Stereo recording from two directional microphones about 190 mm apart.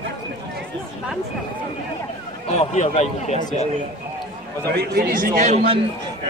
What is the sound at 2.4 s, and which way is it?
A man's voice, 35° left (ahead or behind).